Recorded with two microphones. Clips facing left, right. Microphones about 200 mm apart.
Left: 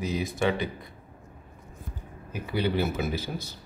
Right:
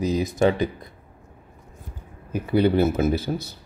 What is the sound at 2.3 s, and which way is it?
Speech, 45° right (ahead or behind).